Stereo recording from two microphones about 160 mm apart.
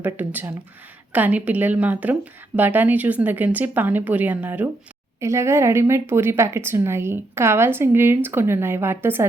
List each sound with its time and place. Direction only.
0.0 s a woman's voice: 10° right (ahead or behind)